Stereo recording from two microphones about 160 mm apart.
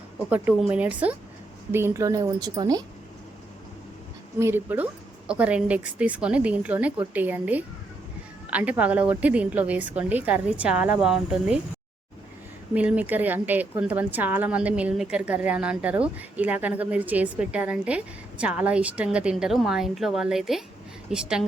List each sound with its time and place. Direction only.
0.3 s a woman's voice: 10° right (ahead or behind)
4.4 s speech: 15° right (ahead or behind)
12.7 s speech: 10° right (ahead or behind)